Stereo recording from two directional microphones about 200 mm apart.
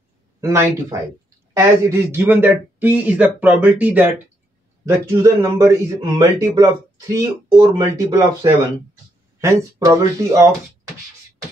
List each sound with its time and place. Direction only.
0.4 s a man's voice: 15° right (ahead or behind)